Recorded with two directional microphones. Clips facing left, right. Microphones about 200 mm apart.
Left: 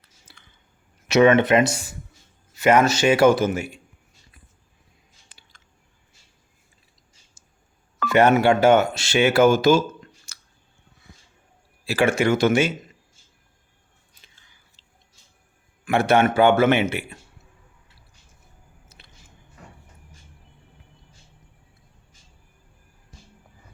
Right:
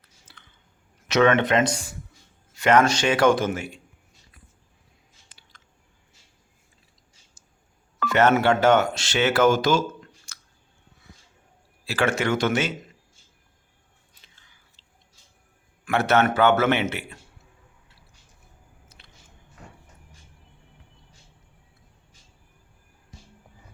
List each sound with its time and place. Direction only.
0.3 s typing: 10° left (ahead or behind)
1.0 s a man's voice: 10° left (ahead or behind)
7.4 s a sound: 10° left (ahead or behind)
8.1 s a man's voice: 15° left (ahead or behind)
10.3 s squish: 10° left (ahead or behind)
11.9 s a man's voice: 10° left (ahead or behind)
15.9 s a man's voice: 10° left (ahead or behind)